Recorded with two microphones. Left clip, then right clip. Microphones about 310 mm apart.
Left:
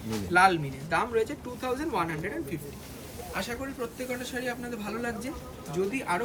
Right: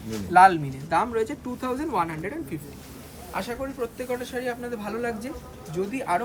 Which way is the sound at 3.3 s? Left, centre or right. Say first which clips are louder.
Right 4 dB; right.